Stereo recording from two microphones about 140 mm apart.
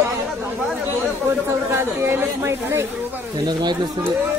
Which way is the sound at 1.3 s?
15° right (ahead or behind).